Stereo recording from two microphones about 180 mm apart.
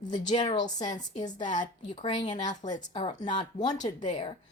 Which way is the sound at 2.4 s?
40° left (ahead or behind).